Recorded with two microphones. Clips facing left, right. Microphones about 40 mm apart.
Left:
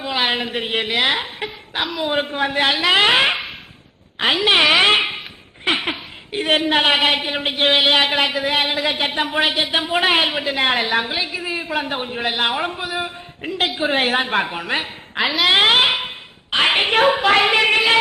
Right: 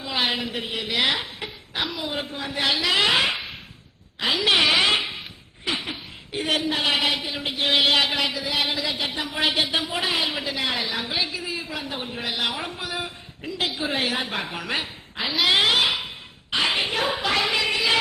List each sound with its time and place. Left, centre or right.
0.0 s a sound: left
0.3 s a woman's voice: left
7.7 s speech: left
9.4 s speech: left
9.7 s speech: left
11.1 s speech: left
11.4 s speech: left
12.8 s a sound: left
13.4 s a woman's voice: left
14.5 s speech: left
15.2 s a woman's voice: centre
15.4 s a sound: left